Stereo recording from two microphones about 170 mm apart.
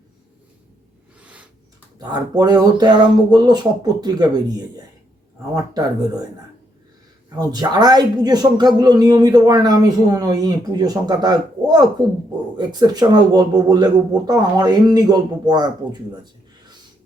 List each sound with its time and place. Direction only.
1.2 s a sound: 5° right (ahead or behind)
2.0 s speech: 25° right (ahead or behind)
7.3 s speech: 25° right (ahead or behind)